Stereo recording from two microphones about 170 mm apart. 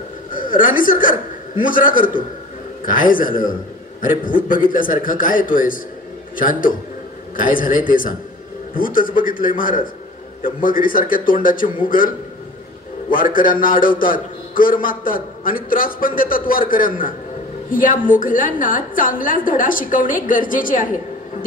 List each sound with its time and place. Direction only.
0.3 s a woman's voice: 55° left (ahead or behind)
13.1 s a man's voice: 55° left (ahead or behind)